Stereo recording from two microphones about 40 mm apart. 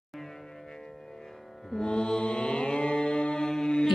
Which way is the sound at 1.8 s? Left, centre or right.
Left.